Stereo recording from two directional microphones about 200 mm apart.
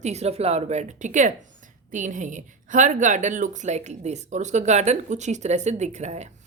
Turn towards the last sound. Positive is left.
turn(degrees=-35)  # may be behind; listen again after turning